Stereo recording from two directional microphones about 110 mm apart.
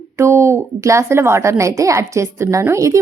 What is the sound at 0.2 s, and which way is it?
A woman's voice, 25° right (ahead or behind).